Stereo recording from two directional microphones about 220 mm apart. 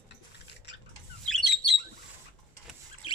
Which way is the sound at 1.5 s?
50° left (ahead or behind).